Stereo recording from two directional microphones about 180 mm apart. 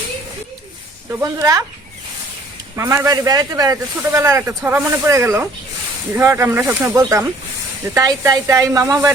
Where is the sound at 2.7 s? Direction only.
15° right (ahead or behind).